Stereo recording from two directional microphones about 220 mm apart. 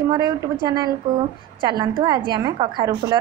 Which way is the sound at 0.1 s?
20° right (ahead or behind).